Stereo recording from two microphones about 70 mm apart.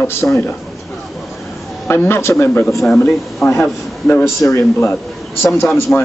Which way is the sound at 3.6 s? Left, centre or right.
Left.